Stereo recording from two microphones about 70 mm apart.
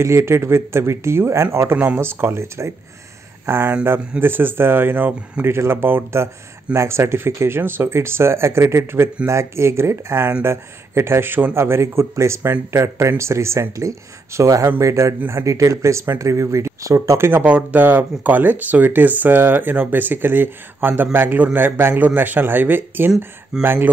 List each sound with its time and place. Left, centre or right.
0.0 s a man's voice: right
17.3 s a man's voice: centre